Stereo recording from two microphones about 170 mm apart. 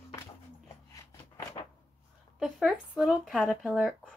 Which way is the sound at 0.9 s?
20° left (ahead or behind).